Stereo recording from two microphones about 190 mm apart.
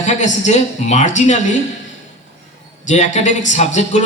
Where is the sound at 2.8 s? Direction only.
40° left (ahead or behind).